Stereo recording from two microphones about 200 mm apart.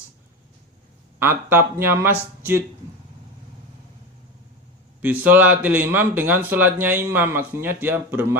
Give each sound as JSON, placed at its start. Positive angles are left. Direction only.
{"t": 1.2, "sound": "speech", "side_deg": -10}
{"t": 5.0, "sound": "speech", "side_deg": -10}